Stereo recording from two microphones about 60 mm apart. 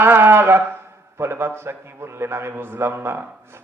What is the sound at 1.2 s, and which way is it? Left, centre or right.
A man's voice, right.